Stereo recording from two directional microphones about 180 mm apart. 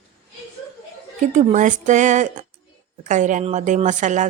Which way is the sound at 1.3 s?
45° right (ahead or behind).